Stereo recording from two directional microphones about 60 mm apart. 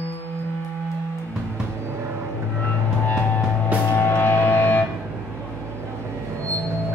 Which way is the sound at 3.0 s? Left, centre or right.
Left.